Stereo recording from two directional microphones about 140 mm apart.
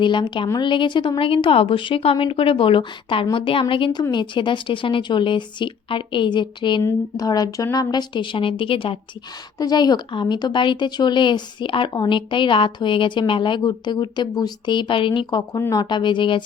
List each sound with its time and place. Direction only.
0.0 s speech: 35° left (ahead or behind)
9.6 s speech: 30° left (ahead or behind)